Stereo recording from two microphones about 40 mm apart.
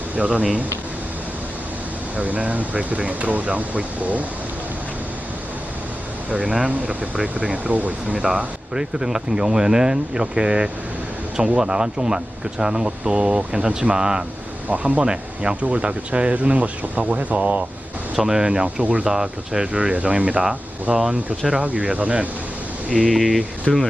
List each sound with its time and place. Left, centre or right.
0.2 s speech: right
2.1 s speech: right
6.3 s speech: right
8.1 s speech: centre
14.7 s speech: right
18.2 s speech: centre
18.4 s speech: right
18.8 s speech: right
19.0 s speech: centre
19.7 s speech: right
22.9 s speech: centre
23.7 s speech: centre